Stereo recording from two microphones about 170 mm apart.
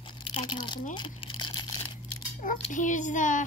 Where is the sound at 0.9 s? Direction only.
25° left (ahead or behind).